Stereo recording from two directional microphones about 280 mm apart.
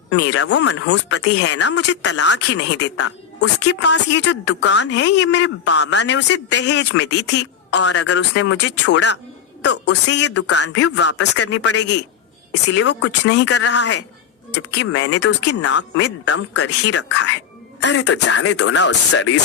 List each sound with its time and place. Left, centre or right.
0.1 s a woman's voice: left